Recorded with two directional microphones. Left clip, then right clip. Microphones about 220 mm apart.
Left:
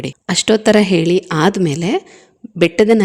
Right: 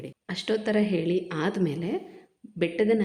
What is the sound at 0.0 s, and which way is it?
Speech, 45° left (ahead or behind).